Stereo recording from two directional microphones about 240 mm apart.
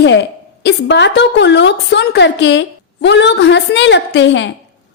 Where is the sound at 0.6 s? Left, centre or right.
Left.